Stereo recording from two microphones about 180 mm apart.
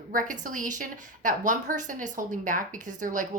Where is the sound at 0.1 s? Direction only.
50° right (ahead or behind).